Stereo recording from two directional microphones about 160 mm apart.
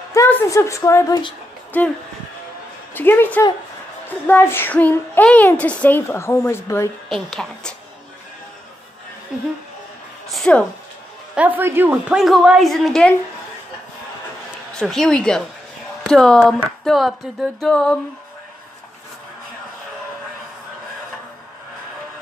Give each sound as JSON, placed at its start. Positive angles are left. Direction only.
{"t": 0.1, "sound": "a woman's voice", "side_deg": 15}
{"t": 1.7, "sound": "a woman's voice", "side_deg": 10}
{"t": 7.1, "sound": "a woman's voice", "side_deg": 0}
{"t": 10.3, "sound": "speech", "side_deg": 5}
{"t": 11.3, "sound": "a woman's voice", "side_deg": -10}
{"t": 14.7, "sound": "a woman's voice", "side_deg": 5}